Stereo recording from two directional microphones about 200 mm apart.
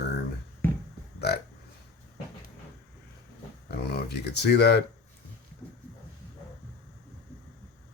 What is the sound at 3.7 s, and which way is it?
Speech, 55° left (ahead or behind).